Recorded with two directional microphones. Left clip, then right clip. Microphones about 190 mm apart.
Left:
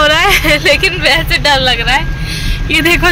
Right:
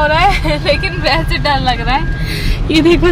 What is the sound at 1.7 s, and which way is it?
Speech, 15° right (ahead or behind).